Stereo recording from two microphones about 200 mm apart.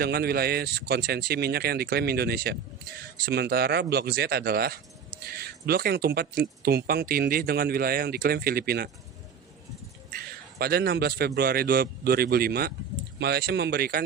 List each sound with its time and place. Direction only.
0.0 s speech: 50° right (ahead or behind)
10.2 s speech: 50° right (ahead or behind)